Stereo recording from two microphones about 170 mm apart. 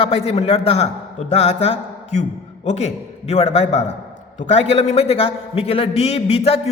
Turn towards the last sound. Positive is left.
turn(degrees=35)  # may be behind; listen again after turning